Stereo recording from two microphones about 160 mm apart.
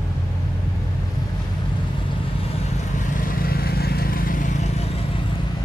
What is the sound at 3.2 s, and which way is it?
Vehicle, 65° left (ahead or behind).